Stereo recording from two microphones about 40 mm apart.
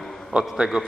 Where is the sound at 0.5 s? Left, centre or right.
Centre.